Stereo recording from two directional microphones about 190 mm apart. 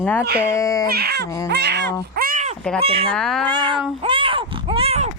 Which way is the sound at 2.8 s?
30° right (ahead or behind).